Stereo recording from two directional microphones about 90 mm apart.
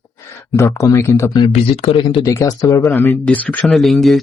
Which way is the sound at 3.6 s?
Centre (ahead or behind).